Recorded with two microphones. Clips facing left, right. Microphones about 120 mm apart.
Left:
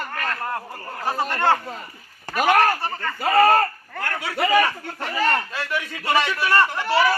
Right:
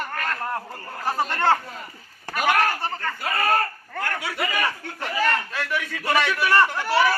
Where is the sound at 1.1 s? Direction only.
5° left (ahead or behind).